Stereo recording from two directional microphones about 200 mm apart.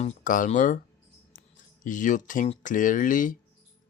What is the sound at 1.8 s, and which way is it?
Speech, 40° left (ahead or behind).